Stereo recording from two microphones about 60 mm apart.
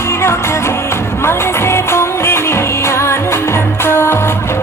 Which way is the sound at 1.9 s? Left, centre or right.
Left.